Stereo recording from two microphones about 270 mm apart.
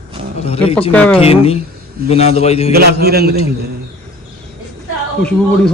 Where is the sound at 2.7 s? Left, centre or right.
Right.